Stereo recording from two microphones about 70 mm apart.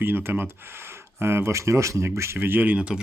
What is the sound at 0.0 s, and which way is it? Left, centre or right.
A man's voice, right.